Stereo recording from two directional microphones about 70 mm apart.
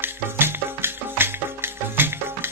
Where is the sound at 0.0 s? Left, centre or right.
Right.